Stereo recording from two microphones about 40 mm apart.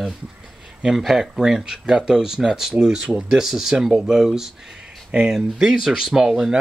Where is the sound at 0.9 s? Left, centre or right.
Centre.